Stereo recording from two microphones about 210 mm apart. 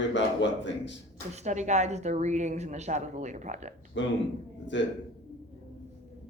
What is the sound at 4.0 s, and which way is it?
Speech, 60° left (ahead or behind).